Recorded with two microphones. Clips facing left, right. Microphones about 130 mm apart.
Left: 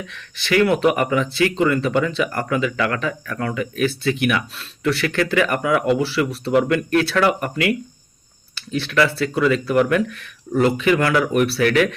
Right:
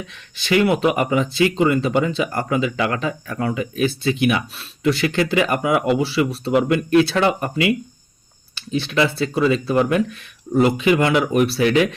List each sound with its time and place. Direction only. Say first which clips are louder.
0.1 s speech: right 1 dB; 15° right (ahead or behind)
8.5 s speech: left 1 dB; 15° right (ahead or behind)